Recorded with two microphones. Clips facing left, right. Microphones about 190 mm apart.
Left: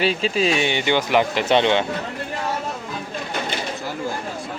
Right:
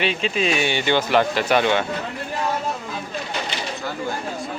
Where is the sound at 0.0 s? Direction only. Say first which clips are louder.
Left 2 dB; 35° left (ahead or behind).